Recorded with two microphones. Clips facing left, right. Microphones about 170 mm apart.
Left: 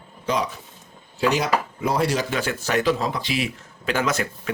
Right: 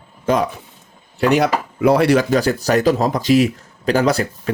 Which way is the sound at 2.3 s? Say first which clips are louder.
Right 8 dB; 40° right (ahead or behind).